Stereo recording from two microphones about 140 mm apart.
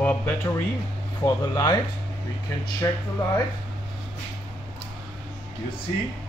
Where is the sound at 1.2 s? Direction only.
25° left (ahead or behind).